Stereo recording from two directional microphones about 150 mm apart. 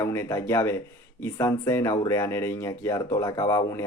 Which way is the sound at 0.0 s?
20° left (ahead or behind).